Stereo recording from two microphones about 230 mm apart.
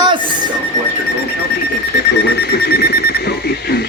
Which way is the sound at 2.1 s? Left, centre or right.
Left.